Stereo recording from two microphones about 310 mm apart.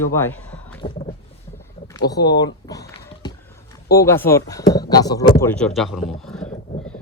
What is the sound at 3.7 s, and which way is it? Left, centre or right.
Speech, centre.